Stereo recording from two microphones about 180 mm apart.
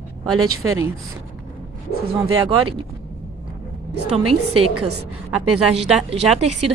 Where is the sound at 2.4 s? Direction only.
30° right (ahead or behind).